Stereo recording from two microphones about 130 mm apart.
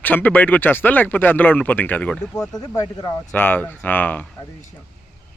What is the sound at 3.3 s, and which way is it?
Speech, 15° left (ahead or behind).